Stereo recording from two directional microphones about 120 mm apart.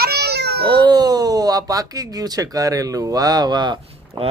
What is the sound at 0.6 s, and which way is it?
Speech, 35° right (ahead or behind).